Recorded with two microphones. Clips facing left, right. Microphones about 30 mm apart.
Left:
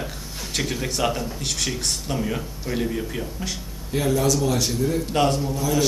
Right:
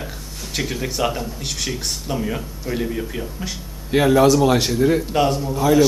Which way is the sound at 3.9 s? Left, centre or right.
Right.